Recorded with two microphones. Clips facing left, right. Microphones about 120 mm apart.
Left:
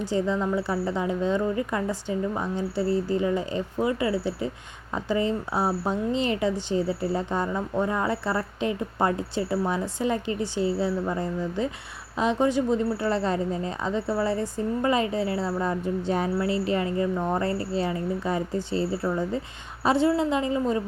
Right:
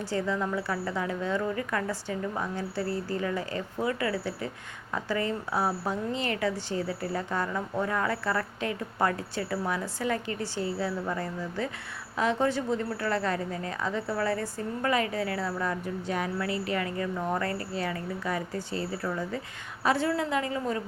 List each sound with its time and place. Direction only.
0.0 s a woman's voice: 20° left (ahead or behind)